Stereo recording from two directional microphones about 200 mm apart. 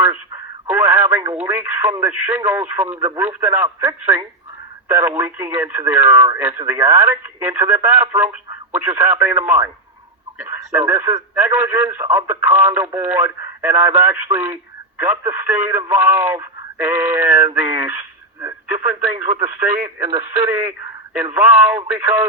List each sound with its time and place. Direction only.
0.7 s radio: 10° right (ahead or behind)
1.4 s speech: 10° right (ahead or behind)
19.1 s speech: 35° right (ahead or behind)
20.1 s speech: 20° right (ahead or behind)